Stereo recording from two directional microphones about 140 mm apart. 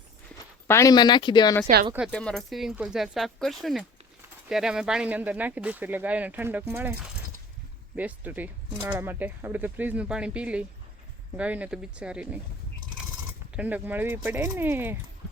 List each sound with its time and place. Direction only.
0.7 s speech: 25° left (ahead or behind)
1.9 s speech: 5° right (ahead or behind)
2.1 s speech: 5° left (ahead or behind)
13.6 s speech: 10° right (ahead or behind)